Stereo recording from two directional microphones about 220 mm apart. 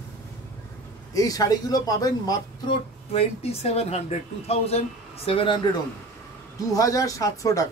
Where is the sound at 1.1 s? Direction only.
15° left (ahead or behind).